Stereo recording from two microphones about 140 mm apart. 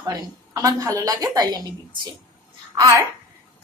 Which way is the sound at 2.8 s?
20° right (ahead or behind).